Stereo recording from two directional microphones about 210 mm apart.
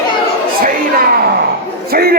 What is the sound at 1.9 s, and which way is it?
Speech, 45° right (ahead or behind).